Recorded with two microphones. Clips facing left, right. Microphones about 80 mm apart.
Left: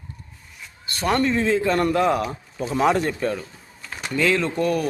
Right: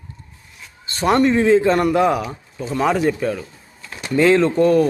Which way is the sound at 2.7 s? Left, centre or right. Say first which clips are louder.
Right 2 dB; centre.